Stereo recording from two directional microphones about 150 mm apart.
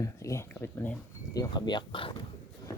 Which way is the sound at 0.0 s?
20° left (ahead or behind).